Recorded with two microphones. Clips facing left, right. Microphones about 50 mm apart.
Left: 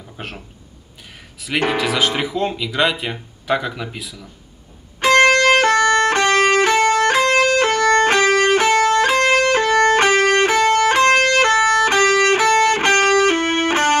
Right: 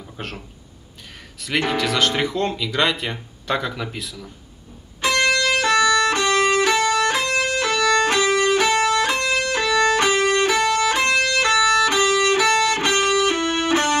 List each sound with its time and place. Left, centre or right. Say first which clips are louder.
0.2 s a sound: even; centre
1.7 s speech: left 1 dB; centre
5.0 s music: left 7 dB; left